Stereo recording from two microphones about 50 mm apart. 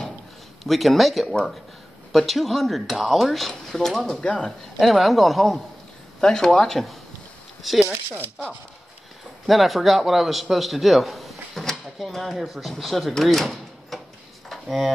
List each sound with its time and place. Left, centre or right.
0.7 s a man's voice: centre
4.2 s speech: left
4.7 s a man's voice: centre
9.5 s a man's voice: centre
13.2 s a sound: centre